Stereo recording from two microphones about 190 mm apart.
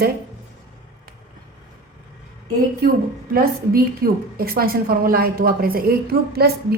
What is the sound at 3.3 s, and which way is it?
Speech, 50° right (ahead or behind).